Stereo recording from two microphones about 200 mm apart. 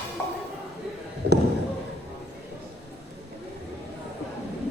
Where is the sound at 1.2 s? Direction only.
55° right (ahead or behind).